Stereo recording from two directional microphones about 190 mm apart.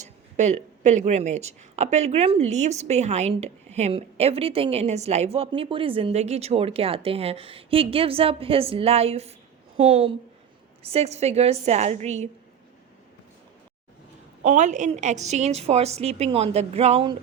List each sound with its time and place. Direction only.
0.0 s a woman's voice: 35° right (ahead or behind)
14.4 s speech: 40° right (ahead or behind)